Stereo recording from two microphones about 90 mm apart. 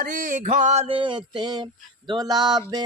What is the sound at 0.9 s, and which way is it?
Mantra, 70° right (ahead or behind).